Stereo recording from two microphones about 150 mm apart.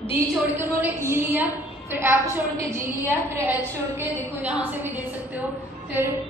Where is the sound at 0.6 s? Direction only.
10° right (ahead or behind).